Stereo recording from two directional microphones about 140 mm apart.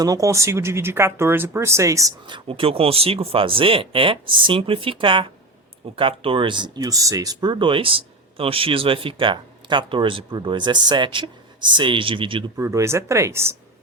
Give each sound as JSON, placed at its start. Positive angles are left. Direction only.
{"t": 0.0, "sound": "speech", "side_deg": -25}
{"t": 2.2, "sound": "speech", "side_deg": -35}
{"t": 12.5, "sound": "speech", "side_deg": -20}